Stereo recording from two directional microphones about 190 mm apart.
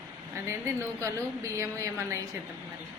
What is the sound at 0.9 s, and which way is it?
A woman's voice, 15° right (ahead or behind).